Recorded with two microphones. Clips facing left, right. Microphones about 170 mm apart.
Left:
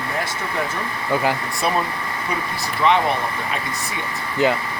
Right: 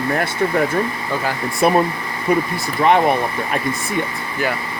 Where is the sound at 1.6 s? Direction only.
55° right (ahead or behind).